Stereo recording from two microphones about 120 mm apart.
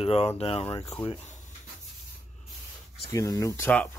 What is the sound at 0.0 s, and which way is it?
Speech, 55° left (ahead or behind).